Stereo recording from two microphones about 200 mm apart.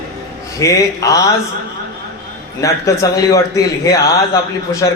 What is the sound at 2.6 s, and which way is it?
A man's voice, 15° left (ahead or behind).